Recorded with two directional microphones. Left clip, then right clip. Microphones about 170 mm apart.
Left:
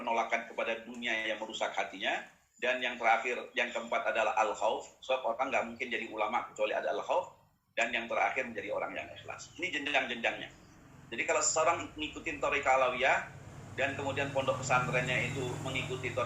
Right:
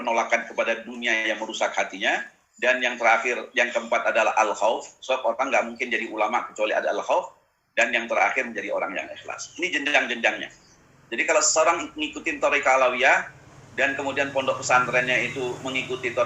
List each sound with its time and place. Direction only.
0.0 s a man's voice: 35° right (ahead or behind)